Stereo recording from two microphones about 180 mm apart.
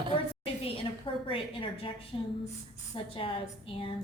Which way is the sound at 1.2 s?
30° left (ahead or behind).